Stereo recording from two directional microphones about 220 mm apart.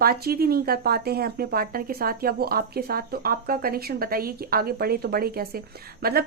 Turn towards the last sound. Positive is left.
turn(degrees=-45)  # may be behind; listen again after turning